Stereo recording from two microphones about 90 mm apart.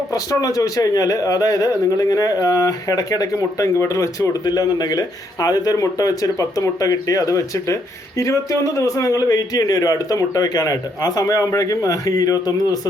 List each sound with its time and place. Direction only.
0.1 s a man's voice: 40° left (ahead or behind)